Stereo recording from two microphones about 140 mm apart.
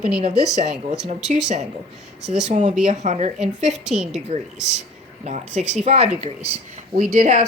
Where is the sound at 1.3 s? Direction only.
55° right (ahead or behind).